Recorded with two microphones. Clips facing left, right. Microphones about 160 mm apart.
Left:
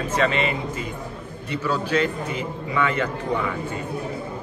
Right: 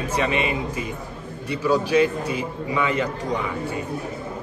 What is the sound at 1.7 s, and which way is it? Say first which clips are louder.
A man's voice: right 4 dB; 15° right (ahead or behind).